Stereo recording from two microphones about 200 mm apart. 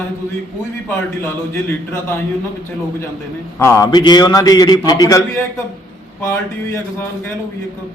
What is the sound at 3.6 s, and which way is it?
A man's voice, 15° left (ahead or behind).